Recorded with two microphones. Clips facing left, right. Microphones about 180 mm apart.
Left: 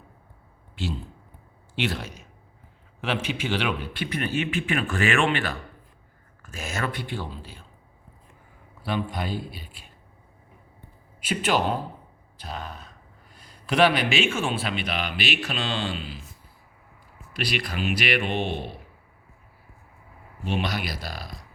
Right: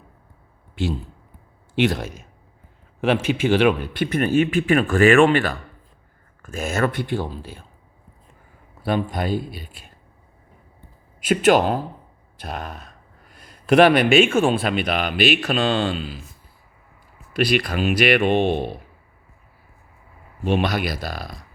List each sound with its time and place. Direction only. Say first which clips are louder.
1.7 s a man's voice: right 8 dB; 50° right (ahead or behind)
8.8 s a man's voice: right 6 dB; 45° right (ahead or behind)
11.2 s a man's voice: right 8 dB; 50° right (ahead or behind)
17.3 s a man's voice: right 9 dB; 50° right (ahead or behind)
20.4 s speech: right 7 dB; 55° right (ahead or behind)